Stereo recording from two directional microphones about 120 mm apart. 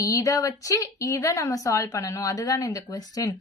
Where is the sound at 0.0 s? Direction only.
30° left (ahead or behind).